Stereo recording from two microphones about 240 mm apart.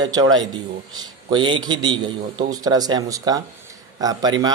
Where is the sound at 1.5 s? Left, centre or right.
Centre.